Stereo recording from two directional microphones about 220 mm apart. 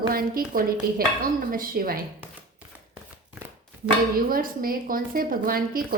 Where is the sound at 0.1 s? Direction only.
40° right (ahead or behind).